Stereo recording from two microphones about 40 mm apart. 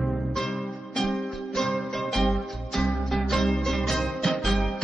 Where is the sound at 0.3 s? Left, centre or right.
Centre.